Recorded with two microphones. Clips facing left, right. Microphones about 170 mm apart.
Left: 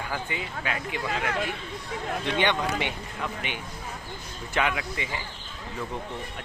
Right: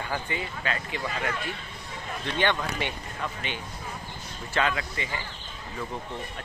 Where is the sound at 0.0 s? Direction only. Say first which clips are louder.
Right 1 dB; 5° left (ahead or behind).